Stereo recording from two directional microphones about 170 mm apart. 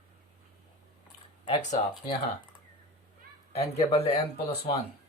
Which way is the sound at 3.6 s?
35° left (ahead or behind).